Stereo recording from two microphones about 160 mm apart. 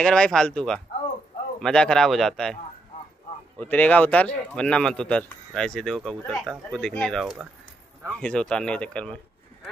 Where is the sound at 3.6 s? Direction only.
10° left (ahead or behind).